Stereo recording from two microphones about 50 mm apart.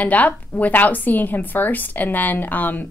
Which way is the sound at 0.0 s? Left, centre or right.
Left.